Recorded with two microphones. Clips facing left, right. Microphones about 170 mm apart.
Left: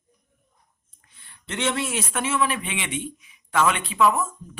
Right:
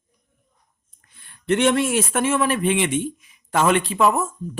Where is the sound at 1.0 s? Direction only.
50° right (ahead or behind).